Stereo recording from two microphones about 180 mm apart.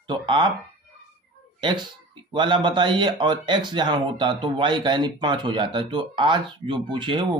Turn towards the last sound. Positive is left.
turn(degrees=-25)  # may be behind; listen again after turning